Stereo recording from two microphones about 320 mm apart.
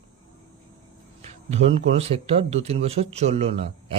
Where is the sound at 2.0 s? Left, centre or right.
Centre.